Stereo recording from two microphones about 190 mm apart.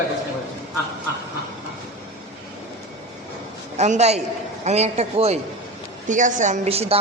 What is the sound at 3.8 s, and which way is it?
A woman's voice, 35° right (ahead or behind).